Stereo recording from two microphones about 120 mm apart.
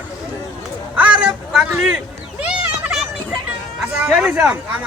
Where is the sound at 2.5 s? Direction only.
5° right (ahead or behind).